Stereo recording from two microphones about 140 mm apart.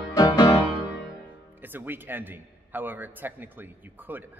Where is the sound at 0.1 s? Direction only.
25° left (ahead or behind).